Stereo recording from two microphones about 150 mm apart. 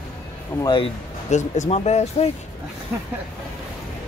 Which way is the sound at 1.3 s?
50° left (ahead or behind).